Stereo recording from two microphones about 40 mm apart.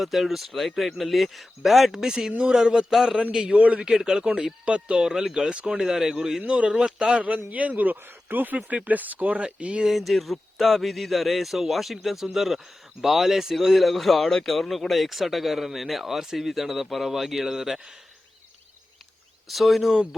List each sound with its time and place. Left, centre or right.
0.0 s a man's voice: centre
4.6 s speech: right
4.9 s speech: centre
6.5 s speech: right
7.2 s speech: right
8.5 s speech: right
8.8 s speech: right
10.0 s a man's voice: centre
19.5 s a man's voice: centre